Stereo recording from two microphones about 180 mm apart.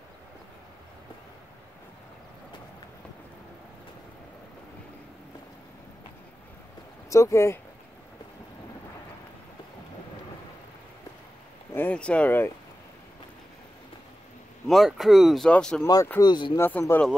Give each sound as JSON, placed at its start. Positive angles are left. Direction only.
{"t": 7.1, "sound": "speech", "side_deg": 15}
{"t": 11.7, "sound": "speech", "side_deg": 10}
{"t": 14.7, "sound": "speech", "side_deg": 0}
{"t": 16.2, "sound": "speech", "side_deg": 25}
{"t": 16.5, "sound": "speech", "side_deg": 15}